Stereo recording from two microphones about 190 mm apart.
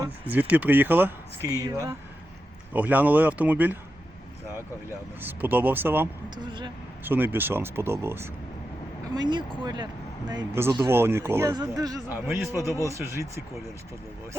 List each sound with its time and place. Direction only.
0.3 s speech: 10° right (ahead or behind)
5.2 s speech: 10° right (ahead or behind)
6.3 s speech: 25° right (ahead or behind)
7.0 s speech: 10° right (ahead or behind)